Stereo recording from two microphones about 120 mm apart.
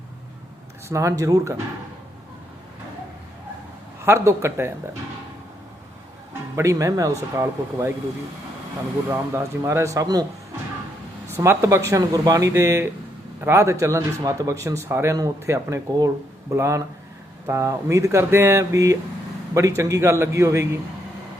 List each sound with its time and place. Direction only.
0.9 s speech: 25° right (ahead or behind)
4.0 s speech: 20° right (ahead or behind)
6.6 s speech: 25° right (ahead or behind)
9.3 s speech: 25° right (ahead or behind)
11.3 s speech: 25° right (ahead or behind)